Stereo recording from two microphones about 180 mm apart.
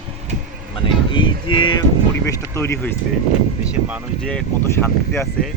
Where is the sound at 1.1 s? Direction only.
25° left (ahead or behind).